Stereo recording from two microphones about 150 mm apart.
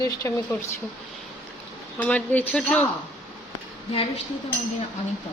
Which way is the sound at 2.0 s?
10° left (ahead or behind).